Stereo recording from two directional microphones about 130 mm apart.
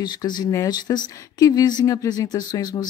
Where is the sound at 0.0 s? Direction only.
35° left (ahead or behind).